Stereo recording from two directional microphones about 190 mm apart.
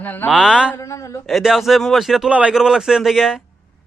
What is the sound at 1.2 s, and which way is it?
A man's voice, centre (ahead or behind).